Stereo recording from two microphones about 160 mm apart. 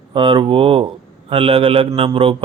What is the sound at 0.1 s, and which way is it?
Speech, 30° right (ahead or behind).